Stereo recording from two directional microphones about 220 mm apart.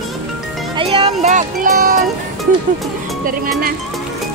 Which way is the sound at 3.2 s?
40° right (ahead or behind).